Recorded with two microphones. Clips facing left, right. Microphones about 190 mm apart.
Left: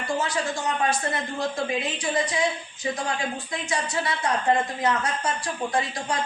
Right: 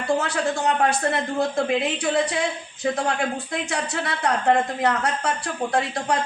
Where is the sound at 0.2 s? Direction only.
65° right (ahead or behind).